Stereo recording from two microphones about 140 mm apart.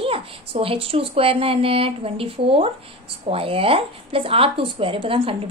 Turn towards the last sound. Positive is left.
turn(degrees=-40)  # may be behind; listen again after turning